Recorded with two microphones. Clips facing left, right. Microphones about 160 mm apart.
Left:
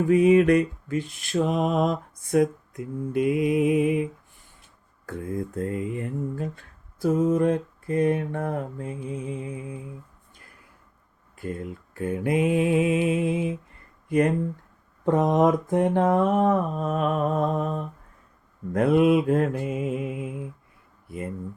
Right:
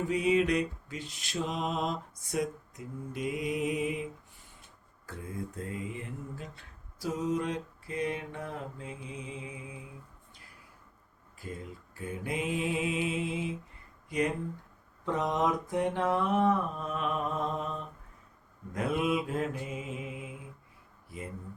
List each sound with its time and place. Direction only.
0.1 s mantra: 55° left (ahead or behind)
5.0 s speech: 55° left (ahead or behind)
10.3 s a sound: 50° left (ahead or behind)
11.3 s mantra: 60° left (ahead or behind)
15.0 s speech: 50° left (ahead or behind)
18.7 s mantra: 55° left (ahead or behind)
21.1 s speech: 55° left (ahead or behind)